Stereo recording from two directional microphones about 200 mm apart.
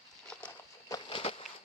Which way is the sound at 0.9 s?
25° left (ahead or behind).